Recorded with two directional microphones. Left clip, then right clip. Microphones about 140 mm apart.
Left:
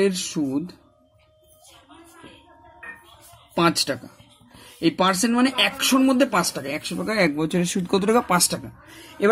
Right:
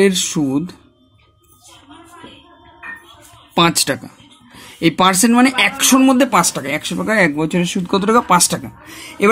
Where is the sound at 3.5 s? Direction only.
40° right (ahead or behind); by 7.3 s 15° right (ahead or behind).